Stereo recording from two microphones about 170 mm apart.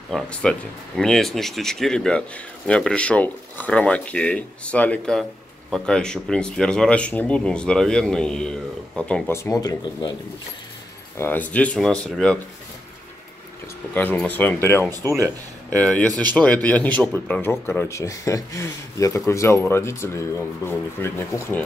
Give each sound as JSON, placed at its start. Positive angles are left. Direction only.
{"t": 0.1, "sound": "speech", "side_deg": 5}
{"t": 11.1, "sound": "speech", "side_deg": 10}
{"t": 13.9, "sound": "speech", "side_deg": 10}
{"t": 14.9, "sound": "speech", "side_deg": -20}
{"t": 15.8, "sound": "speech", "side_deg": 5}